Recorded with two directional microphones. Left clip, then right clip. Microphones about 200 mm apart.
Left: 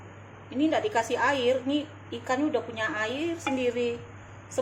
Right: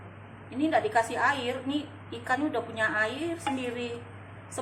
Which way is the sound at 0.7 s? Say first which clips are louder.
Right 3 dB; 20° left (ahead or behind).